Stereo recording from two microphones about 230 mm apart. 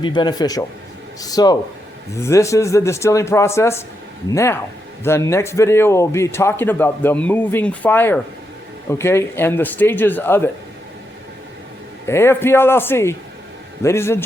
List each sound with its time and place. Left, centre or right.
0.0 s a man's voice: centre
12.0 s a man's voice: centre